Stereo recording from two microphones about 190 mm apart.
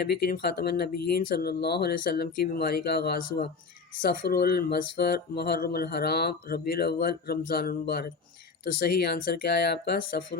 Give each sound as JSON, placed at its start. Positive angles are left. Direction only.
{"t": 0.0, "sound": "speech", "side_deg": 55}